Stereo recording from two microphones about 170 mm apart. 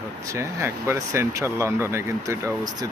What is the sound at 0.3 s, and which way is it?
Speech, 15° right (ahead or behind).